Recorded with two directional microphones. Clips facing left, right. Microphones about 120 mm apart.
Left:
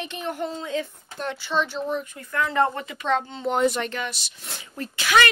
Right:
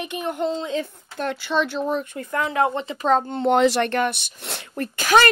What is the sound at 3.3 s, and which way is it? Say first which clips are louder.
Speech: right 5 dB; 65° right (ahead or behind).